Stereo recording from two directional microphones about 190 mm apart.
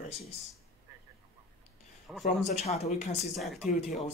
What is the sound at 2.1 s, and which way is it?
Speech, centre (ahead or behind).